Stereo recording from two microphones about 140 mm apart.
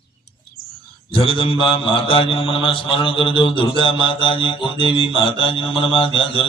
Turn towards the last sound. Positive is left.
turn(degrees=40)  # may be behind; listen again after turning